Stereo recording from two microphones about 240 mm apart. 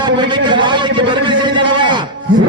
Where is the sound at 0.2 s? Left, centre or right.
Centre.